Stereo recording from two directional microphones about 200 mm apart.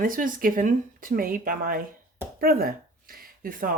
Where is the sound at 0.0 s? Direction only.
45° right (ahead or behind).